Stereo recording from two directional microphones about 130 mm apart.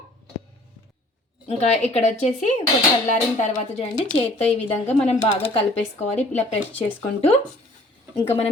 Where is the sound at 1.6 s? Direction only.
55° left (ahead or behind); by 4.1 s 70° left (ahead or behind).